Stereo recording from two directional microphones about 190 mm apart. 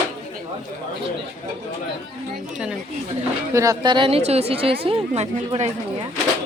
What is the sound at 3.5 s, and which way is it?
A woman's voice, 15° right (ahead or behind).